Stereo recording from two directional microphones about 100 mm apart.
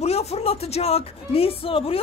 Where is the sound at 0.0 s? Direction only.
90° left.